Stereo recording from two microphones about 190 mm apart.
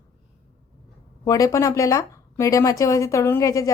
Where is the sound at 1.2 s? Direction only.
15° left (ahead or behind).